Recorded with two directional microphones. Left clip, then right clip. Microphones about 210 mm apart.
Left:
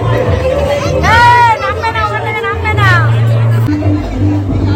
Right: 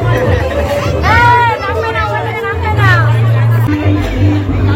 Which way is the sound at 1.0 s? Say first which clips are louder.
Left 2 dB; 55° left (ahead or behind).